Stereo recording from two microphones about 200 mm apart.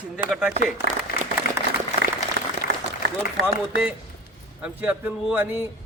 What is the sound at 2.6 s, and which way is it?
Applause, 50° left (ahead or behind).